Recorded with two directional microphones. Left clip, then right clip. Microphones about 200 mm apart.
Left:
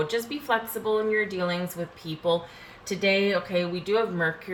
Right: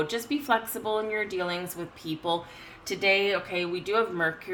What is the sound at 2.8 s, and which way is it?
Speech, 45° right (ahead or behind).